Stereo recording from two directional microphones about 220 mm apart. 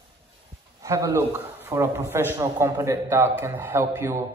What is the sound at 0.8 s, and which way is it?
A man's voice, 15° right (ahead or behind).